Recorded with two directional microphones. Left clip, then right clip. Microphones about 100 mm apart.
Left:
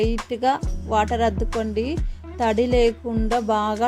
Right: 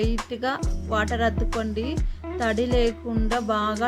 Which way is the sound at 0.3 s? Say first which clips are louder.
Left 6 dB; 35° left (ahead or behind).